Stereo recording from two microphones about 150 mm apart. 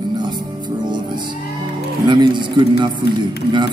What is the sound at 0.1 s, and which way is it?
Music, 30° right (ahead or behind).